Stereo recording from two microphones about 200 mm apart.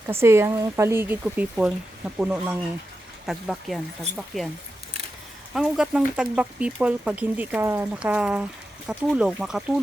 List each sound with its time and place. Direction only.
0.1 s speech: 15° right (ahead or behind)
5.5 s speech: centre (ahead or behind)